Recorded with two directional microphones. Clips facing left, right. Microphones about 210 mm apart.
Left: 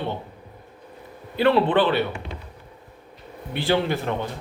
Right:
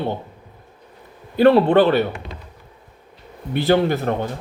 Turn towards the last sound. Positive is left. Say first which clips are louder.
# right 5 dB
turn(degrees=-45)  # may be behind; listen again after turning